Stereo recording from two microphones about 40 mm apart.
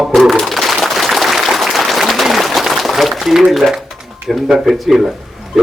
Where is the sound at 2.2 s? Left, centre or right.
Centre.